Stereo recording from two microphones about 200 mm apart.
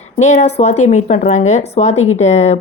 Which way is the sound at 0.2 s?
35° left (ahead or behind).